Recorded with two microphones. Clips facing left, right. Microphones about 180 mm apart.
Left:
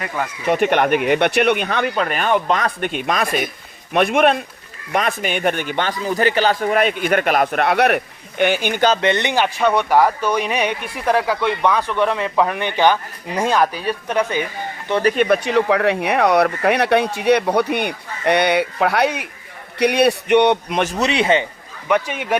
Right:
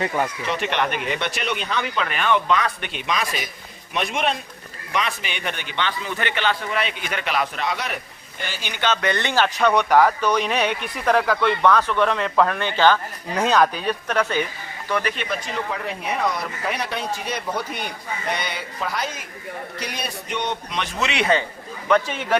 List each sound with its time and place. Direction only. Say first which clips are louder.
0.4 s a man's voice: left 7 dB; 50° left (ahead or behind)
9.0 s speech: left 3 dB; 20° left (ahead or behind)
14.8 s speech: left 7 dB; 30° left (ahead or behind)
15.1 s a man's voice: left 12 dB; 55° left (ahead or behind); by 21.4 s 25° left (ahead or behind)
21.8 s speech: left 1 dB; 10° left (ahead or behind)